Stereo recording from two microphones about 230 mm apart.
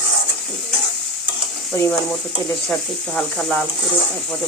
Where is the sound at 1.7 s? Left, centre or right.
Centre.